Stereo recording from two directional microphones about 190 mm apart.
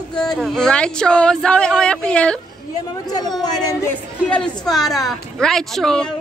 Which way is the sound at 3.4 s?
20° left (ahead or behind).